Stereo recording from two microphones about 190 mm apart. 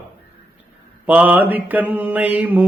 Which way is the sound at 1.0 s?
10° right (ahead or behind).